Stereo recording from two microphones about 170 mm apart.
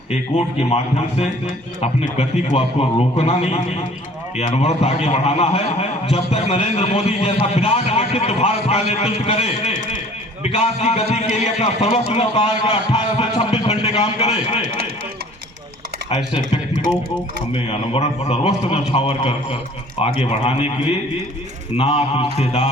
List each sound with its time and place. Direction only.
0.6 s a man's voice: 40° left (ahead or behind)
16.0 s a man's voice: 35° left (ahead or behind)